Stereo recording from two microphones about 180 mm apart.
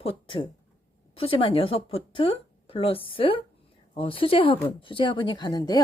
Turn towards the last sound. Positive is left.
turn(degrees=20)  # may be behind; listen again after turning